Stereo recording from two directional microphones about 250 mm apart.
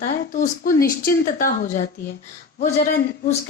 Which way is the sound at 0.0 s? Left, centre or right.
Left.